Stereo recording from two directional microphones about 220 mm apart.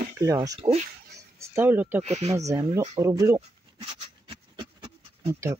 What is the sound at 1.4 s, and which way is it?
Speech, 10° right (ahead or behind).